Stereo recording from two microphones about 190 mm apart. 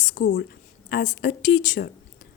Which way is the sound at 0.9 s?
55° left (ahead or behind).